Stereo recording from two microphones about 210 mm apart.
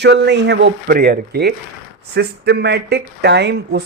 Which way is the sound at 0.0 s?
55° right (ahead or behind).